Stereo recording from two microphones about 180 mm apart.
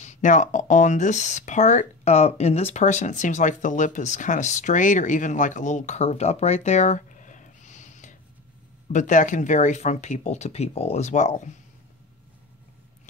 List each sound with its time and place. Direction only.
0.0 s speech: 40° left (ahead or behind)